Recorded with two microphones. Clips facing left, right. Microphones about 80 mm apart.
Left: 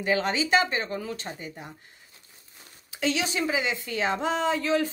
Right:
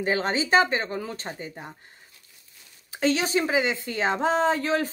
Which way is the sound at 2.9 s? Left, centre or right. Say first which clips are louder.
Right 4 dB; right.